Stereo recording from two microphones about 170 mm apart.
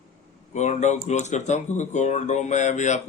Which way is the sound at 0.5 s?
45° left (ahead or behind).